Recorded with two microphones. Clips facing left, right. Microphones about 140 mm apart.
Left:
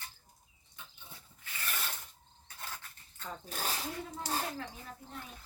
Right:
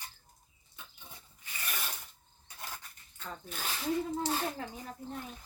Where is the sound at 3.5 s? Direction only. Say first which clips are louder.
Left 3 dB; 40° left (ahead or behind).